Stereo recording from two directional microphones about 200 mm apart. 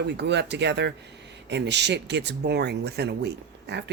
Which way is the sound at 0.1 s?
60° right (ahead or behind).